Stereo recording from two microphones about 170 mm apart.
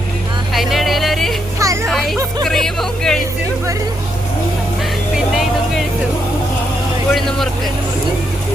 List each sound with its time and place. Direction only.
0.5 s music: centre (ahead or behind)
1.5 s a sound: 15° right (ahead or behind)
1.9 s music: centre (ahead or behind)
2.4 s a sound: centre (ahead or behind)
5.1 s vehicle: centre (ahead or behind)
7.1 s vehicle: 5° left (ahead or behind)